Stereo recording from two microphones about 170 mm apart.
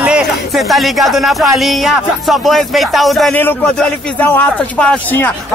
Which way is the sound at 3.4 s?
10° left (ahead or behind).